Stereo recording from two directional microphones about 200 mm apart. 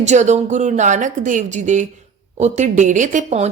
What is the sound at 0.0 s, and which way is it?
Speech, 35° right (ahead or behind).